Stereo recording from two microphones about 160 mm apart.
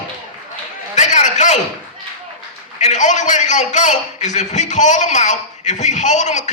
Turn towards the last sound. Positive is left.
turn(degrees=50)  # may be behind; listen again after turning